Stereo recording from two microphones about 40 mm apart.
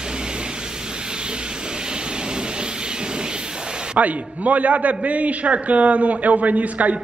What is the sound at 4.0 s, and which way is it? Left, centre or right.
A man's voice, right.